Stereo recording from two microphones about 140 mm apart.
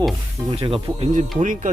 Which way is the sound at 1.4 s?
65° right (ahead or behind).